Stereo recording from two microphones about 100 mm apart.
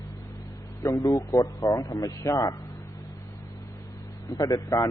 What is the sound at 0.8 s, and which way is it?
A man's voice, 30° left (ahead or behind).